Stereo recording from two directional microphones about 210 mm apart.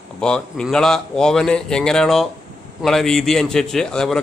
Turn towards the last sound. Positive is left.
turn(degrees=5)  # may be behind; listen again after turning